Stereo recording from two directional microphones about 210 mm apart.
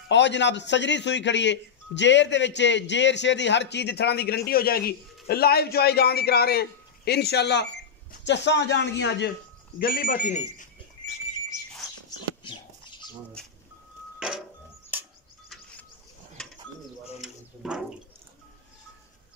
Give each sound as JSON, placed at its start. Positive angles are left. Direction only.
{"t": 0.1, "sound": "a man's voice", "side_deg": 55}
{"t": 9.8, "sound": "speech", "side_deg": 45}
{"t": 17.2, "sound": "a sound", "side_deg": -5}